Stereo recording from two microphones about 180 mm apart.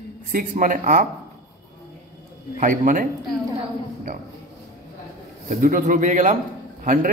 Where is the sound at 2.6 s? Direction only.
50° right (ahead or behind).